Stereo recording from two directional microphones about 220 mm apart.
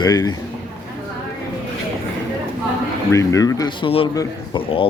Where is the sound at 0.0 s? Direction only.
15° left (ahead or behind).